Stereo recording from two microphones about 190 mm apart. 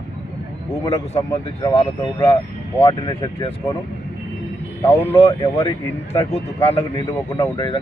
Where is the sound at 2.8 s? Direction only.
30° left (ahead or behind).